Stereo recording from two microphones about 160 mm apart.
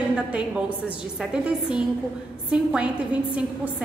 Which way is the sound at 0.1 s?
5° right (ahead or behind).